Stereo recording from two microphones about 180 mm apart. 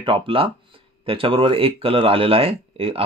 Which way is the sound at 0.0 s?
30° right (ahead or behind).